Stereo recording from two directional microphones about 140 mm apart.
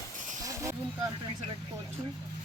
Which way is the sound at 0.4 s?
20° right (ahead or behind).